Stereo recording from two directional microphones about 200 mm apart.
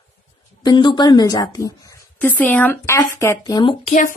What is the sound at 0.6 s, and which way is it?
A woman's voice, 20° left (ahead or behind).